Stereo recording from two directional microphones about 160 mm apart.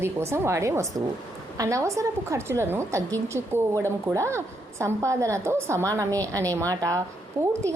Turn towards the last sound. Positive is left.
turn(degrees=-20)  # may be behind; listen again after turning